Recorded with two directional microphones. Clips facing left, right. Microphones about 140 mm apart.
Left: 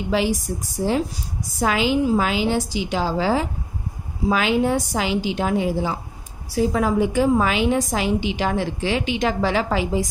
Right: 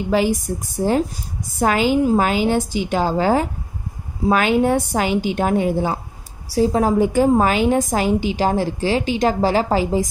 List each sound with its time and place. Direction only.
0.1 s a woman's voice: 50° right (ahead or behind)
6.5 s a woman's voice: 35° right (ahead or behind)